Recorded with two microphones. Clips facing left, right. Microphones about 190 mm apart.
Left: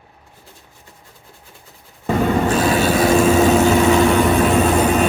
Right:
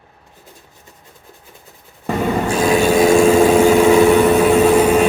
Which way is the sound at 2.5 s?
10° right (ahead or behind).